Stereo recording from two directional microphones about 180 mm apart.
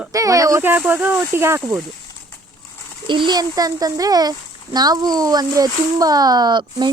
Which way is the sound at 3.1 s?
25° right (ahead or behind).